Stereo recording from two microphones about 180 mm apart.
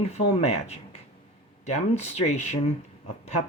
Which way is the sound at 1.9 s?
40° left (ahead or behind).